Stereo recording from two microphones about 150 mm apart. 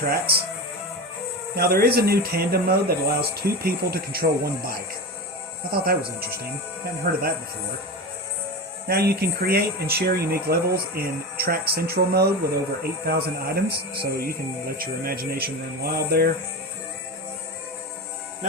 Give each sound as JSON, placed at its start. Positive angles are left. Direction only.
{"t": 0.1, "sound": "speech", "side_deg": -90}
{"t": 1.5, "sound": "speech", "side_deg": -90}
{"t": 8.9, "sound": "speech", "side_deg": -90}